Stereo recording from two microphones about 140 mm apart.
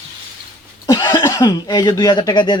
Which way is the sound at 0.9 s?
30° left (ahead or behind).